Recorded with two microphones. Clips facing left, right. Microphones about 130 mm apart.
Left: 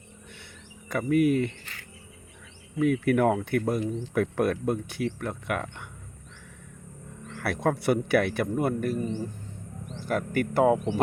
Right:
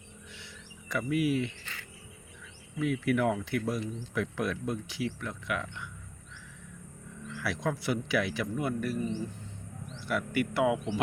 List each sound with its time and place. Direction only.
0.9 s speech: 50° left (ahead or behind)
2.7 s a man's voice: 50° left (ahead or behind)
7.3 s a man's voice: 55° left (ahead or behind)